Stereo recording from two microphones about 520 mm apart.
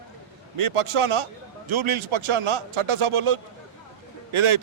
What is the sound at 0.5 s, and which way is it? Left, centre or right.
A man's voice, right.